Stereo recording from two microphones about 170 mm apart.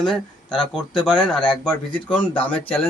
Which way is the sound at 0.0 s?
Centre (ahead or behind).